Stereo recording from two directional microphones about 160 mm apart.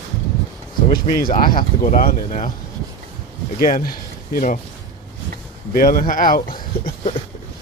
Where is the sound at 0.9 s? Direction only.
65° left (ahead or behind).